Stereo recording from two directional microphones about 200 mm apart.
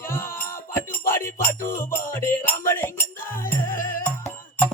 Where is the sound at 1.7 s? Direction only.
10° left (ahead or behind).